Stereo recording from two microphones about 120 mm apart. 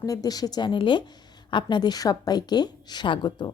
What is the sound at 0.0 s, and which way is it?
A woman's voice, 30° left (ahead or behind).